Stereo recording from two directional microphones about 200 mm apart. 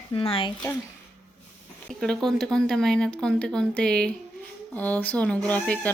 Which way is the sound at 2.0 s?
Centre (ahead or behind).